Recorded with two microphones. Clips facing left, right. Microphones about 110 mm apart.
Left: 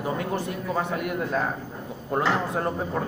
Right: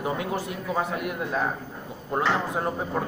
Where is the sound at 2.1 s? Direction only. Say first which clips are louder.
Left 1 dB; 10° right (ahead or behind).